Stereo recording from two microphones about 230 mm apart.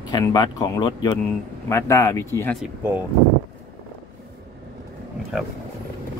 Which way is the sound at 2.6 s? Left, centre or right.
Centre.